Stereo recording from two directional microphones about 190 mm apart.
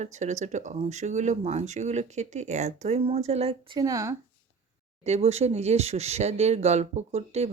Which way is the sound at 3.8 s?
15° right (ahead or behind).